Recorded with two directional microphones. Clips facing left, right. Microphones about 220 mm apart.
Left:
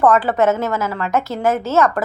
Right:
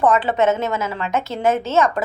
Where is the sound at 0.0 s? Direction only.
25° right (ahead or behind).